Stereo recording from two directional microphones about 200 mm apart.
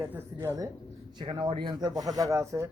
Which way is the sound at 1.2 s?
25° right (ahead or behind).